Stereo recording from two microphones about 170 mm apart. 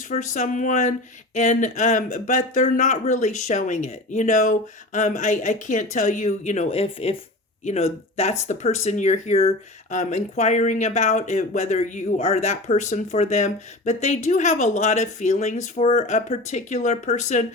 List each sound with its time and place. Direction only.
0.1 s speech: 45° left (ahead or behind)